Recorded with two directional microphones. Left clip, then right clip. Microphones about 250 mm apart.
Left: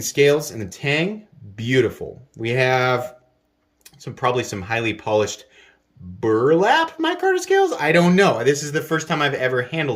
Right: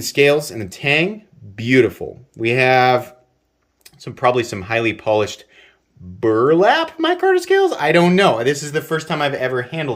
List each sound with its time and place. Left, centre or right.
0.0 s speech: centre